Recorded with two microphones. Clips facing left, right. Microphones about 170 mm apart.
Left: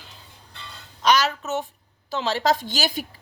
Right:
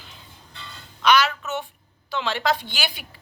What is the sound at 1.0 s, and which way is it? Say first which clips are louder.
A woman's voice: right 1 dB; 40° left (ahead or behind).